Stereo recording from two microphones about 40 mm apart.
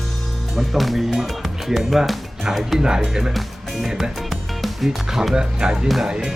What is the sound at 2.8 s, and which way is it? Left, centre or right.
Speech, centre.